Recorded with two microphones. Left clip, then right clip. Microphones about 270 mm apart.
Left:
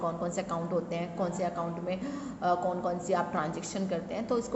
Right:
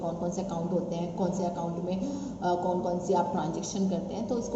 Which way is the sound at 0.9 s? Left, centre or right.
Centre.